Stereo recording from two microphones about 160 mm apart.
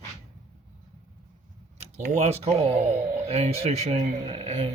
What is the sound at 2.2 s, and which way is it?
Speech, 40° right (ahead or behind).